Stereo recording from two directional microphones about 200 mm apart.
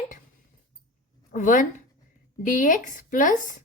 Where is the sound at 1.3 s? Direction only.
40° left (ahead or behind).